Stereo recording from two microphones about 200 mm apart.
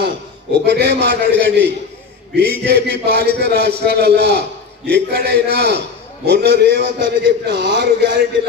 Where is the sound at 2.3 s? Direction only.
50° left (ahead or behind).